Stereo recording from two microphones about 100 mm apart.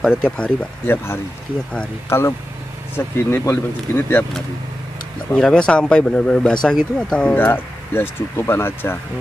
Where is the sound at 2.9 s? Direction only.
25° left (ahead or behind).